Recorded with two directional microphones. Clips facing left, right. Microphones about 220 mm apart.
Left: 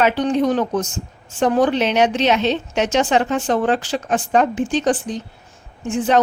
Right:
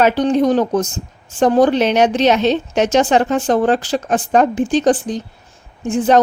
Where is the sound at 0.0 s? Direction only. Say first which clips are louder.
Right 3 dB; 40° right (ahead or behind).